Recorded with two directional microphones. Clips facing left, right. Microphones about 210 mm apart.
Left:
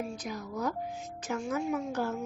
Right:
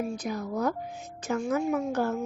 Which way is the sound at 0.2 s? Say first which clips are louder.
Right 5 dB; 55° right (ahead or behind).